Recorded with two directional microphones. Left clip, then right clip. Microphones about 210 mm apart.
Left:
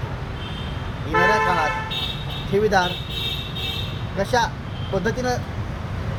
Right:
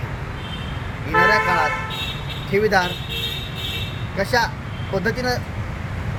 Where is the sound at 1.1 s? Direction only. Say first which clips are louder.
Right 2 dB; 50° right (ahead or behind).